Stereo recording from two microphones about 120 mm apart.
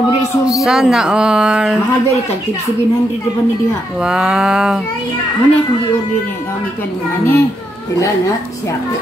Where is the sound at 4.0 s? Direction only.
5° right (ahead or behind).